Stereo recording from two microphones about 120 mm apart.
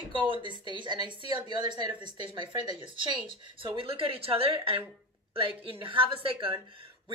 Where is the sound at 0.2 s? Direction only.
40° right (ahead or behind).